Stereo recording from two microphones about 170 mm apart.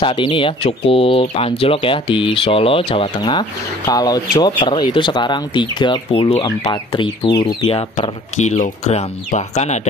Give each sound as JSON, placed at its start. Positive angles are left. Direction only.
{"t": 0.0, "sound": "speech", "side_deg": 30}